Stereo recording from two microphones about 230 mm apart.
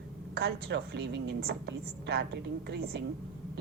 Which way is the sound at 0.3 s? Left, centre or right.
Right.